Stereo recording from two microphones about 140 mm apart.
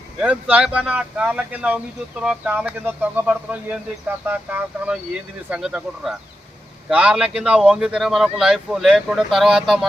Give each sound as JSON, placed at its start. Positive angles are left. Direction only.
{"t": 0.2, "sound": "speech", "side_deg": -10}